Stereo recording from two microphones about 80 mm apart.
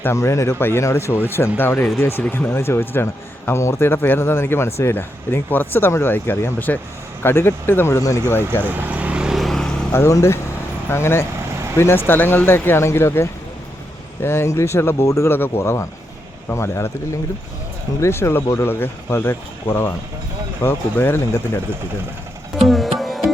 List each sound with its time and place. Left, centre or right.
0.0 s speech: left
7.9 s speech: left
8.6 s vehicle: right; by 9.6 s centre
9.9 s speech: left
18.0 s speech: left
22.5 s music: centre